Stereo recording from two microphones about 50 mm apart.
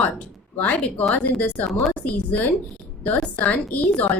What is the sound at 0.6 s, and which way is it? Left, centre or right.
Speech, left.